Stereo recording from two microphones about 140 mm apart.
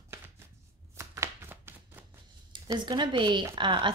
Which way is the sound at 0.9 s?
20° right (ahead or behind).